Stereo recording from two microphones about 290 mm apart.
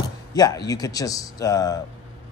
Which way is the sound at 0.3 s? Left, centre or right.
Centre.